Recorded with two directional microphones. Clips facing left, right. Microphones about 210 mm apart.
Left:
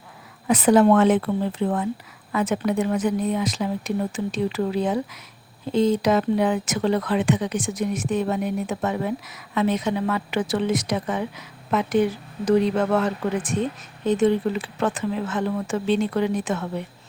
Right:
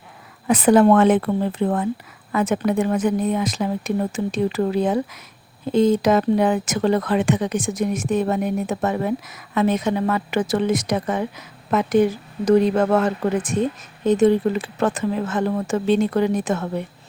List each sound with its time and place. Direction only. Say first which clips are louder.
0.4 s speech: right 2 dB; 55° right (ahead or behind)